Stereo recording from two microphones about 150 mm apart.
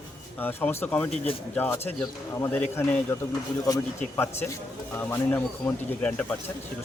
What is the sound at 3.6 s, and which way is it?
Speech, 25° left (ahead or behind).